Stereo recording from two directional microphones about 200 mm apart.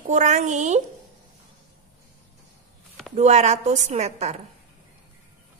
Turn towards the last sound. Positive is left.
turn(degrees=-35)  # may be behind; listen again after turning